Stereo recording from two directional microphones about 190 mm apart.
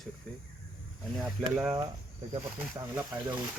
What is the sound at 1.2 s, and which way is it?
Speech, 5° right (ahead or behind).